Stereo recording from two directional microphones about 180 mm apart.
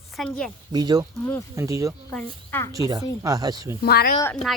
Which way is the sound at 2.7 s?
20° right (ahead or behind).